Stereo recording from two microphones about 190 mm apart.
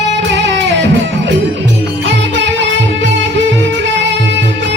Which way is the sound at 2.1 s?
70° right (ahead or behind).